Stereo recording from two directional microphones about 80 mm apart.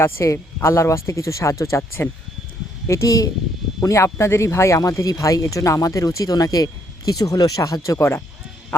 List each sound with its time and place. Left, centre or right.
0.0 s speech: left